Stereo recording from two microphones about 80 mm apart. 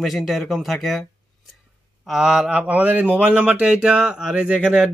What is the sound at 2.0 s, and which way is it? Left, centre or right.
Speech, centre.